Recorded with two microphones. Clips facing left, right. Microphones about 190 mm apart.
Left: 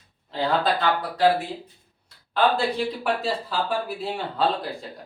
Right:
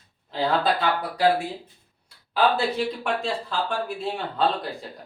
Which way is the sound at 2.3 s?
Centre (ahead or behind).